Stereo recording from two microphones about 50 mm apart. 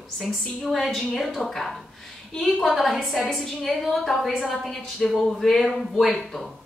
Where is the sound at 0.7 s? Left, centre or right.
Centre.